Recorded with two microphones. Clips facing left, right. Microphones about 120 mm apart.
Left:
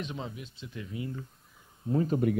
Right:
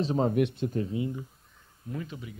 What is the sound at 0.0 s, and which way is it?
Speech, 40° right (ahead or behind).